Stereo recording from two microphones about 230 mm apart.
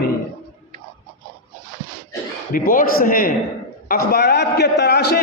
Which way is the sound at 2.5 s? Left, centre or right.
Left.